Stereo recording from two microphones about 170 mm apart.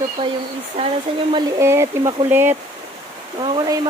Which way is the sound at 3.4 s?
30° right (ahead or behind).